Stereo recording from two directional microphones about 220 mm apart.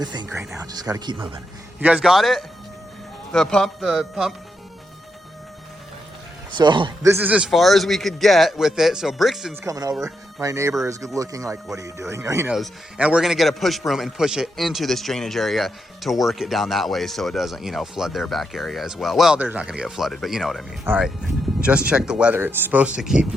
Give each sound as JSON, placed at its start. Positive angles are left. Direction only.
{"t": 0.0, "sound": "speech", "side_deg": -20}
{"t": 1.8, "sound": "a man's voice", "side_deg": -5}
{"t": 6.5, "sound": "a man's voice", "side_deg": -20}
{"t": 9.6, "sound": "a man's voice", "side_deg": -15}